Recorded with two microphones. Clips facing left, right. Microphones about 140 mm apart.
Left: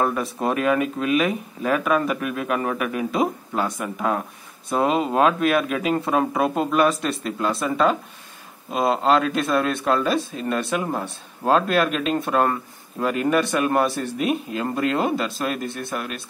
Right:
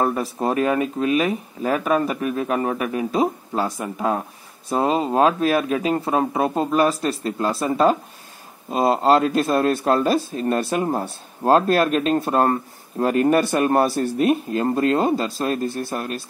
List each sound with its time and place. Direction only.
0.4 s speech: 30° right (ahead or behind)
6.4 s speech: 5° left (ahead or behind)
7.0 s speech: 40° right (ahead or behind)
14.7 s speech: 30° right (ahead or behind)